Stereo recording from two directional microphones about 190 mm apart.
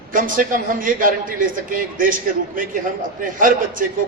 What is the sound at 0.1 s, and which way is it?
A man's voice, 45° right (ahead or behind).